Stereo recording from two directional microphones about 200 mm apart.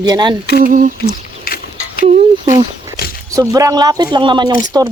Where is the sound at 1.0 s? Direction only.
50° left (ahead or behind).